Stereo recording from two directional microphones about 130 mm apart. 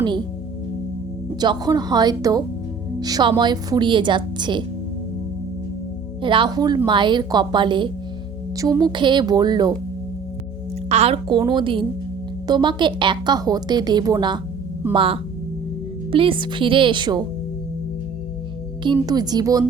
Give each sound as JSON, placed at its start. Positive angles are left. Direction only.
{"t": 1.4, "sound": "a woman's voice", "side_deg": -30}
{"t": 6.2, "sound": "a woman's voice", "side_deg": -40}
{"t": 8.5, "sound": "a woman's voice", "side_deg": -25}
{"t": 10.8, "sound": "a sound", "side_deg": -55}
{"t": 11.3, "sound": "a woman's voice", "side_deg": -35}
{"t": 19.0, "sound": "a woman's voice", "side_deg": -30}